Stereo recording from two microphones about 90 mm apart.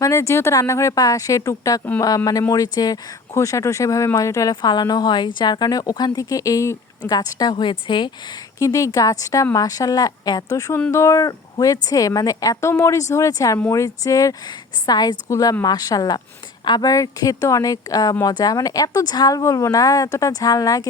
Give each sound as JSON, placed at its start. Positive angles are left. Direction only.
{"t": 0.0, "sound": "a woman's voice", "side_deg": 35}
{"t": 4.6, "sound": "a woman's voice", "side_deg": 50}
{"t": 7.5, "sound": "speech", "side_deg": 65}
{"t": 8.5, "sound": "a woman's voice", "side_deg": 35}
{"t": 19.4, "sound": "a woman's voice", "side_deg": 35}